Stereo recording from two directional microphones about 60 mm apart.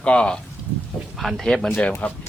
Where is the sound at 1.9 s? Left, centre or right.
Left.